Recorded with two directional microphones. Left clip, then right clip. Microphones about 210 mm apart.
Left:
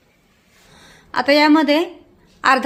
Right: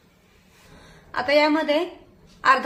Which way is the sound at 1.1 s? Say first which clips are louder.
Left 6 dB; 55° left (ahead or behind).